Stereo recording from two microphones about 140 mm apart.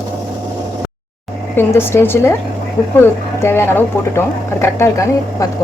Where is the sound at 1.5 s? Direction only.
15° left (ahead or behind).